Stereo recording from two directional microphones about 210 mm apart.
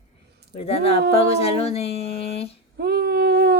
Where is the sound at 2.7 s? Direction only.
50° right (ahead or behind).